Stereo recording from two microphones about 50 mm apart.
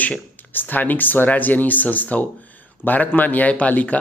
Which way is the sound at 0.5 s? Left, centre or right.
Left.